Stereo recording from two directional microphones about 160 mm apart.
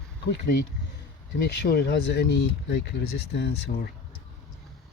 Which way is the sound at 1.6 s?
85° left.